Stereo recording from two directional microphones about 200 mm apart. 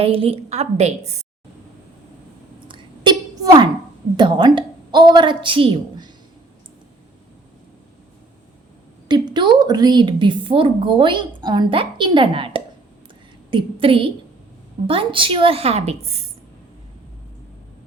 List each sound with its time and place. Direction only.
0.0 s a woman's voice: 30° right (ahead or behind)
2.6 s a sound: 25° right (ahead or behind)
4.2 s a woman's voice: 20° right (ahead or behind)
9.0 s a woman's voice: 20° right (ahead or behind)